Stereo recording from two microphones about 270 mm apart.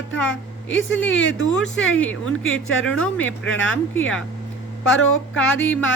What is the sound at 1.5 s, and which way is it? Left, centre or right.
Speech, centre.